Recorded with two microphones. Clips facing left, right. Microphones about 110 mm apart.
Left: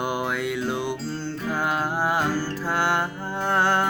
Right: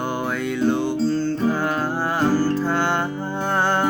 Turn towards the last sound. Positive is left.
turn(degrees=0)  # may be behind; listen again after turning